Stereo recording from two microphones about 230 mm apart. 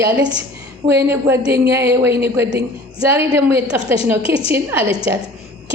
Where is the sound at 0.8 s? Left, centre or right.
Centre.